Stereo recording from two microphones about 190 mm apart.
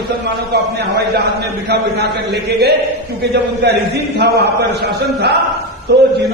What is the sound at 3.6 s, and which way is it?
Speech, 60° right (ahead or behind).